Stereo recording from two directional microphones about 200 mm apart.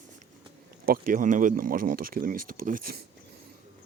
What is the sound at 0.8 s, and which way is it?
Speech, 45° right (ahead or behind).